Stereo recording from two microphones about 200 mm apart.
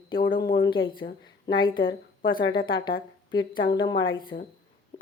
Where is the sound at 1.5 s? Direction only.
25° left (ahead or behind).